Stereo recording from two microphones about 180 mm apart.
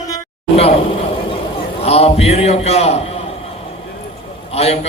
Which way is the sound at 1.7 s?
35° left (ahead or behind).